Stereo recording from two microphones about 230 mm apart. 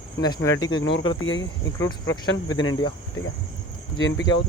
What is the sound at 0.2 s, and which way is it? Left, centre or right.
Speech, centre.